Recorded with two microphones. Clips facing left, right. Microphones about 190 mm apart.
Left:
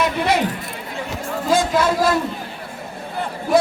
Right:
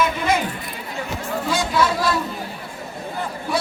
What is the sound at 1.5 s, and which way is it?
Chatter, 45° left (ahead or behind).